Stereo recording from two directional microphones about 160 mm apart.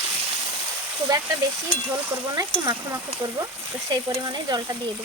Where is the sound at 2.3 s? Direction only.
25° right (ahead or behind).